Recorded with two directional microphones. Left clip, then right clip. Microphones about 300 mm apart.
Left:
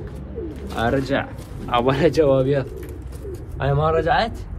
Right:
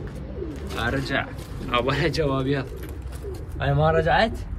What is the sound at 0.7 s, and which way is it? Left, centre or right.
Speech, centre.